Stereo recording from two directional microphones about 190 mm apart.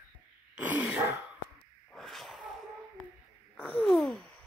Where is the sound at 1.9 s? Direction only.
Centre (ahead or behind).